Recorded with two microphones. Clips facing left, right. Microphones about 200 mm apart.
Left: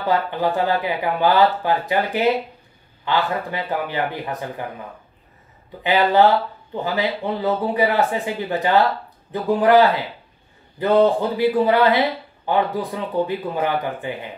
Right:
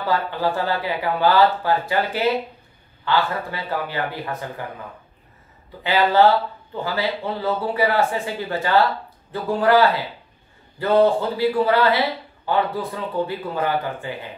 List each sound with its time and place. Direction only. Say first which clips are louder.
0.0 s speech: left 2 dB; 15° left (ahead or behind)
5.9 s speech: left 1 dB; 15° left (ahead or behind)